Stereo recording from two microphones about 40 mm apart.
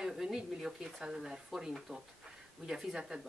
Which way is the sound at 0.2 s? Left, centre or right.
Centre.